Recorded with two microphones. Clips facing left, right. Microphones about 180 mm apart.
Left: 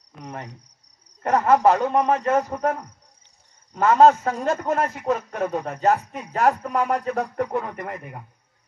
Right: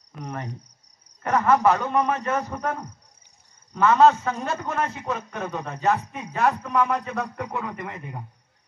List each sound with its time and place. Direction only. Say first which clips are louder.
1.2 s a man's voice: left 2 dB; 35° left (ahead or behind)
3.8 s speech: left 2 dB; 45° left (ahead or behind)